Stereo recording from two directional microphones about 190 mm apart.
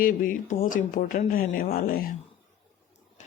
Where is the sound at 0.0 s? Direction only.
45° left (ahead or behind).